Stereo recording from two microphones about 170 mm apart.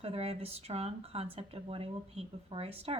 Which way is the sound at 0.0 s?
35° right (ahead or behind).